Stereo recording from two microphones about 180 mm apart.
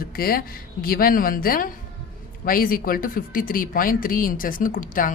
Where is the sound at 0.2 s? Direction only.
55° left (ahead or behind).